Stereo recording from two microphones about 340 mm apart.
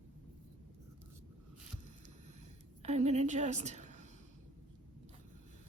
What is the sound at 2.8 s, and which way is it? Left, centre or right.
A woman's voice, centre.